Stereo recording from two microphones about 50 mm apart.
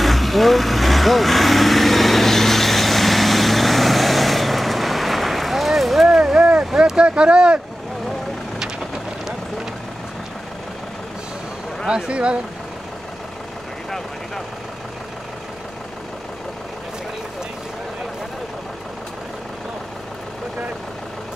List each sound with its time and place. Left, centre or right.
0.0 s vehicle: centre
6.0 s a sound: centre
6.6 s speech: centre
11.9 s speech: right